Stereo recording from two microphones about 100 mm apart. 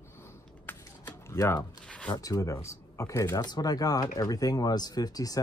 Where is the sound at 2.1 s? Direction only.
35° left (ahead or behind).